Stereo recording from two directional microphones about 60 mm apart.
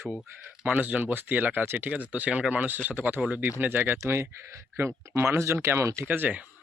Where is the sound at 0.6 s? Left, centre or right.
Right.